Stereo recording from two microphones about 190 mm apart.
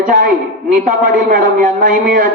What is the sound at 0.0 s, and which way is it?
A woman's voice, 45° right (ahead or behind).